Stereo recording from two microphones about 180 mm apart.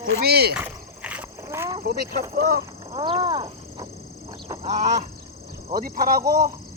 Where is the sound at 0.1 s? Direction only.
65° right (ahead or behind).